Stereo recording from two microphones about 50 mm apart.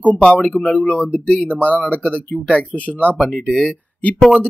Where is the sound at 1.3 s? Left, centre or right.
Centre.